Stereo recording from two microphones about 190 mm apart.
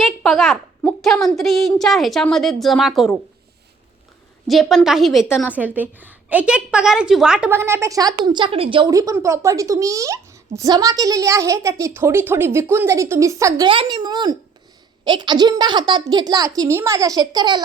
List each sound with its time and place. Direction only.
0.0 s a woman's voice: centre (ahead or behind)
4.4 s a woman's voice: centre (ahead or behind)
5.5 s a woman's voice: 10° right (ahead or behind)